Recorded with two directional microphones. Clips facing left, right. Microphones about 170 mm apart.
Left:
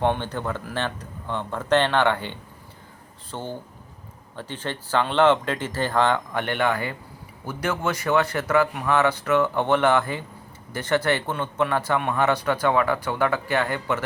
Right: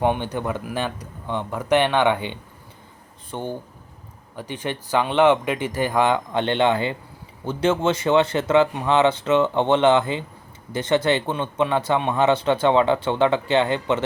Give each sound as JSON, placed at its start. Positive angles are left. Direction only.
{"t": 0.0, "sound": "a man's voice", "side_deg": -15}